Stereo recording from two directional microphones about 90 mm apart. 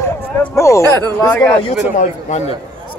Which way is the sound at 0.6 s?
35° left (ahead or behind).